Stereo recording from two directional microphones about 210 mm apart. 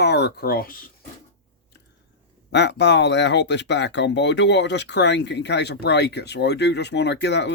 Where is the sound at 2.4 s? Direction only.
55° left (ahead or behind).